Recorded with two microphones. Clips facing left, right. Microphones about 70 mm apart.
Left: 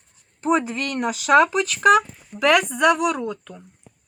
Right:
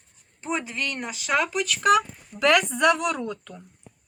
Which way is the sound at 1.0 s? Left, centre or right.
Left.